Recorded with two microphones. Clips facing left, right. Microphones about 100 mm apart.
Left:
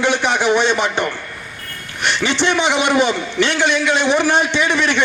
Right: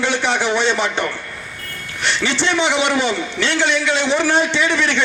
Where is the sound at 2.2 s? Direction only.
15° left (ahead or behind).